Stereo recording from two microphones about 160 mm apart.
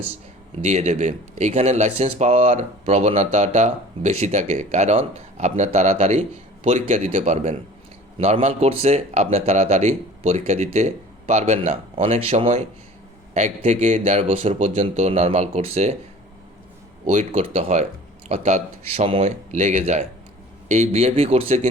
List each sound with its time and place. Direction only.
0.6 s speech: 45° right (ahead or behind)
17.3 s speech: 35° right (ahead or behind)